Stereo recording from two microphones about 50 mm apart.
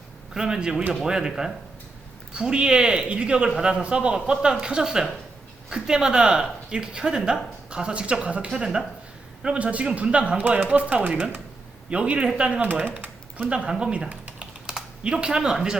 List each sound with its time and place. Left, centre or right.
0.3 s speech: centre
12.8 s typing: right
13.5 s speech: centre